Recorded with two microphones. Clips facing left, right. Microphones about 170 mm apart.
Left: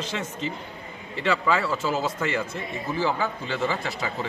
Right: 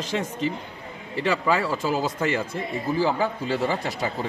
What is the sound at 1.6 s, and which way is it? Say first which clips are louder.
Speech: right 1 dB; 10° right (ahead or behind).